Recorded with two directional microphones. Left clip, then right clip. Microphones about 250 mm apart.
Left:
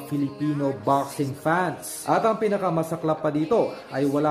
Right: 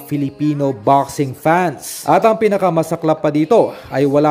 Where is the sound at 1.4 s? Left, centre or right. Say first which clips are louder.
Right 9 dB; right.